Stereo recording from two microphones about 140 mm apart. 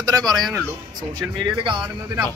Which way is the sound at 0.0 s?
25° right (ahead or behind).